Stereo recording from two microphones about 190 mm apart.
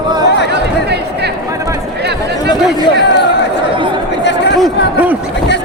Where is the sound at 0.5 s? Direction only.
60° right (ahead or behind).